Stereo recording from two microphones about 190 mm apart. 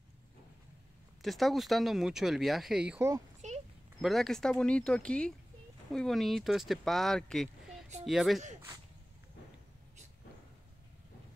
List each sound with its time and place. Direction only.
1.2 s speech: centre (ahead or behind)
3.4 s a sound: 40° right (ahead or behind)
4.0 s speech: centre (ahead or behind)